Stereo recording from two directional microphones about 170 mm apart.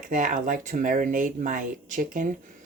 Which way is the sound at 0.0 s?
50° right (ahead or behind).